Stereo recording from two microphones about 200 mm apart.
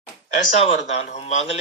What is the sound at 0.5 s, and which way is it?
Speech, 35° left (ahead or behind).